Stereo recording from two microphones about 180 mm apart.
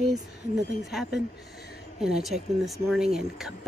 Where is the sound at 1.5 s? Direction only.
60° left (ahead or behind).